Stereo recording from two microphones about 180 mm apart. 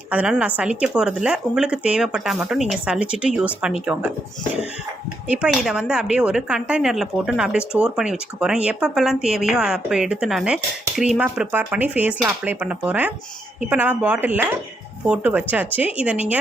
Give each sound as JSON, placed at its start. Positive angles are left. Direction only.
{"t": 0.1, "sound": "speech", "side_deg": -5}
{"t": 5.3, "sound": "speech", "side_deg": -5}